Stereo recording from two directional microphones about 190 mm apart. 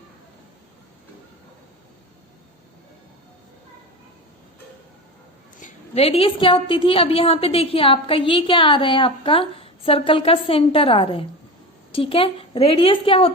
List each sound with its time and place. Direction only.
5.5 s a woman's voice: 40° left (ahead or behind)